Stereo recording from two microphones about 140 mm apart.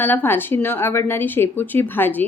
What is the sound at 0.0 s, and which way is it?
A woman's voice, 15° left (ahead or behind).